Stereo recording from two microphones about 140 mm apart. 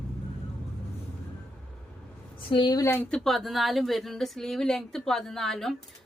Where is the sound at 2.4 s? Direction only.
35° left (ahead or behind).